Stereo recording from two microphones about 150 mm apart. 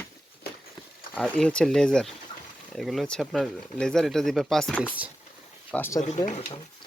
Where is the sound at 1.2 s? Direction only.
5° left (ahead or behind).